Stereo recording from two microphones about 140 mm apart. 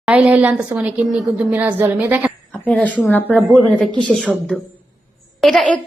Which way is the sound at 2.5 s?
5° left (ahead or behind).